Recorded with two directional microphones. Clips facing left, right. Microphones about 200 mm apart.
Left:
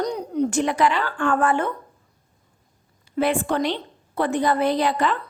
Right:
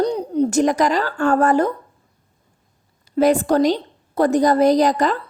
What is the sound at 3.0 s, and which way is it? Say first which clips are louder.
A woman's voice: right 6 dB; 40° right (ahead or behind).